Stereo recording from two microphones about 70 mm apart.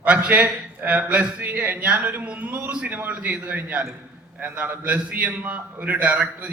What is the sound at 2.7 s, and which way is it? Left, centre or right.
A man's voice, centre.